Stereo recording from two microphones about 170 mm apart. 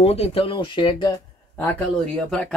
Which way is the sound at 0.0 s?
35° left (ahead or behind).